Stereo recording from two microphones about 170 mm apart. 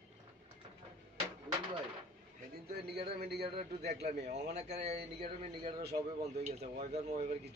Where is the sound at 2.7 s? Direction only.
70° right (ahead or behind).